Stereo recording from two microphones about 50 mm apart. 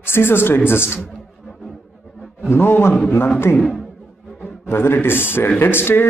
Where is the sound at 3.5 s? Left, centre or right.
Left.